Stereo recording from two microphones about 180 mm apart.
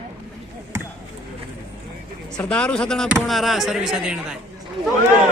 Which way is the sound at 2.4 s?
5° left (ahead or behind).